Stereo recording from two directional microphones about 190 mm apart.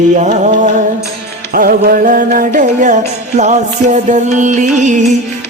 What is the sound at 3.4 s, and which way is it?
Music, 40° right (ahead or behind).